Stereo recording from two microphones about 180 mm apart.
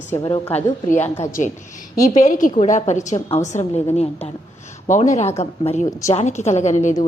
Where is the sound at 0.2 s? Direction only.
25° left (ahead or behind).